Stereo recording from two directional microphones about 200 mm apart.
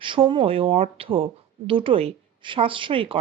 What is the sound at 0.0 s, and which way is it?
A woman's voice, 25° right (ahead or behind).